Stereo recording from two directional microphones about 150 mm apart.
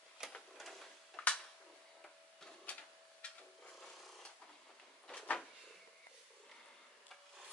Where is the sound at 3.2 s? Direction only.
5° left (ahead or behind).